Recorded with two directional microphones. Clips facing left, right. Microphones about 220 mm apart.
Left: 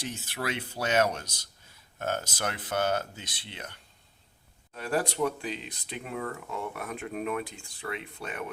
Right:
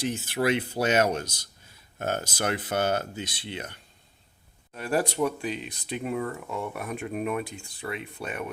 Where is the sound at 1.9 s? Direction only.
15° right (ahead or behind).